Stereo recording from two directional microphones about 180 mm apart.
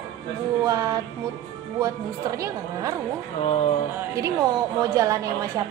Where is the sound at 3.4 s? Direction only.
35° left (ahead or behind).